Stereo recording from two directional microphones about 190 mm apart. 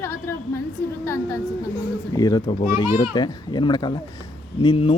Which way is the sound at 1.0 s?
15° left (ahead or behind).